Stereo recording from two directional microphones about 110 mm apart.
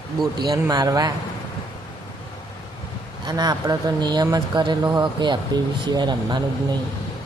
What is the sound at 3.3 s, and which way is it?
Speech, 35° right (ahead or behind).